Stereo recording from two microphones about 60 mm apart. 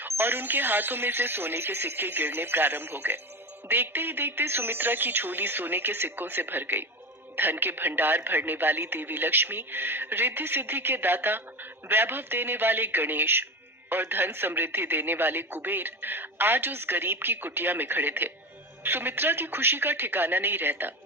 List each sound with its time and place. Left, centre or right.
0.0 s speech: right